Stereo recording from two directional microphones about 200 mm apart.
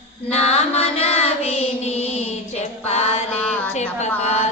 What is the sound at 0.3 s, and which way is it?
Child singing, 30° left (ahead or behind).